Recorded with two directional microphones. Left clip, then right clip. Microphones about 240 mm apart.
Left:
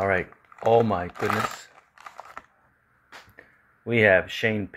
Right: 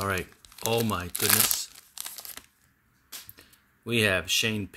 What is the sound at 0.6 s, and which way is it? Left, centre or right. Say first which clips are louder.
Speech: left 8 dB; right.